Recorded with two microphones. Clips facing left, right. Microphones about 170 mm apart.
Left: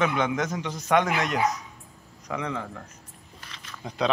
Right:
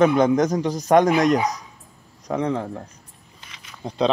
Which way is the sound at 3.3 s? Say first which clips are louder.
Left 1 dB; 25° right (ahead or behind).